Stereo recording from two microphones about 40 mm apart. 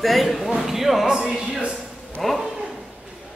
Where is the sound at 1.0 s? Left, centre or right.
Centre.